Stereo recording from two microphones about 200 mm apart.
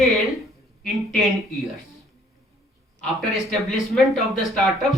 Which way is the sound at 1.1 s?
Centre (ahead or behind).